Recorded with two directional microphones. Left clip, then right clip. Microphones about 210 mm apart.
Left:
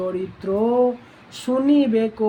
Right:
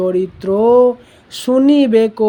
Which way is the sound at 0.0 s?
45° right (ahead or behind).